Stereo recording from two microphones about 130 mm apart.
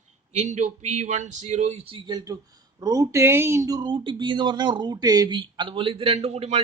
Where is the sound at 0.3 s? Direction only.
65° right (ahead or behind).